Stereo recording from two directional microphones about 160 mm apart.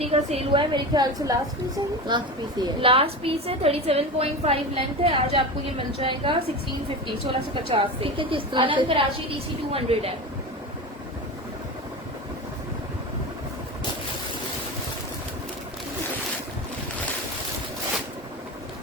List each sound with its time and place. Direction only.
0.0 s a woman's voice: 40° right (ahead or behind)